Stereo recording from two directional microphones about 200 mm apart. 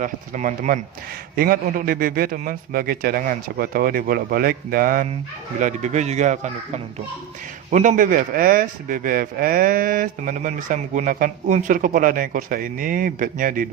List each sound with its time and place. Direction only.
0.0 s a man's voice: 40° right (ahead or behind)
7.7 s a man's voice: 40° right (ahead or behind)